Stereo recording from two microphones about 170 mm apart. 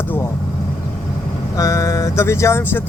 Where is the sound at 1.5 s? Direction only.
20° left (ahead or behind).